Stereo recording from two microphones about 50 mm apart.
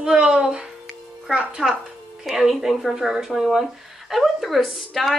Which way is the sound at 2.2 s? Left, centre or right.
Centre.